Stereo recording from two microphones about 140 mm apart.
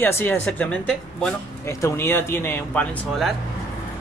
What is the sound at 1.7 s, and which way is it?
Speech, 20° left (ahead or behind).